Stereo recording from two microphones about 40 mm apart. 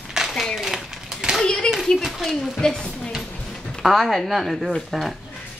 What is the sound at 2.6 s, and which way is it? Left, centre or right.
Speech, centre.